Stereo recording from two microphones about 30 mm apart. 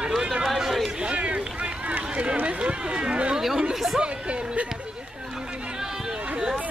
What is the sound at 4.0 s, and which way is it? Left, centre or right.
Chatter, right.